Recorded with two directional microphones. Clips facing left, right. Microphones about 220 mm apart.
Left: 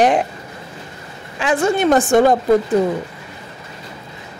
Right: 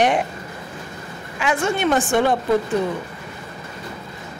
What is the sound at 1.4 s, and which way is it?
Speech, 35° left (ahead or behind).